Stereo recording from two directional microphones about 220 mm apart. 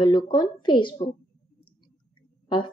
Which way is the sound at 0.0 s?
20° left (ahead or behind).